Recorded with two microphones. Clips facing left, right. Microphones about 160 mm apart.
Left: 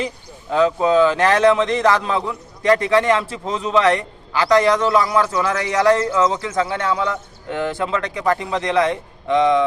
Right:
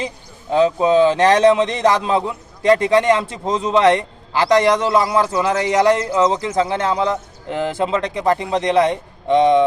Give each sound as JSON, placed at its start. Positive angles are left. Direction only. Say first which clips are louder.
{"t": 0.5, "sound": "a man's voice", "louder": "right 1 dB", "side_deg": -25}